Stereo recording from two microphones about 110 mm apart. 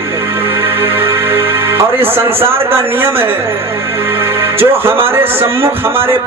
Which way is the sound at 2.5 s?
20° right (ahead or behind).